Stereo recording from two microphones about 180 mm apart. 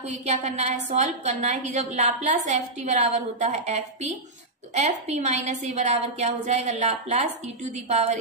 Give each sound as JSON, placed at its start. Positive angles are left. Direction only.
{"t": 0.0, "sound": "a woman's voice", "side_deg": -40}